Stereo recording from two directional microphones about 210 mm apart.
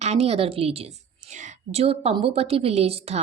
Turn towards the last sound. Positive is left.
turn(degrees=-30)  # may be behind; listen again after turning